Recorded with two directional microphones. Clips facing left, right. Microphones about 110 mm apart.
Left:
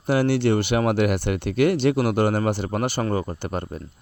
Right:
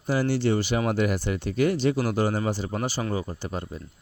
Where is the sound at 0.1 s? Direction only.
65° left (ahead or behind).